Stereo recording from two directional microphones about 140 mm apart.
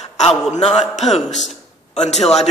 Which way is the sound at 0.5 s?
50° left (ahead or behind).